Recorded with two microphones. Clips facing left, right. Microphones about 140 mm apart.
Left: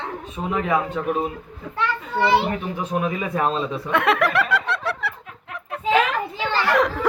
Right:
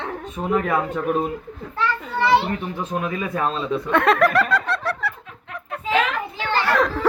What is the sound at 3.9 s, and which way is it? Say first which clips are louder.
Speech: right 2 dB; 5° left (ahead or behind).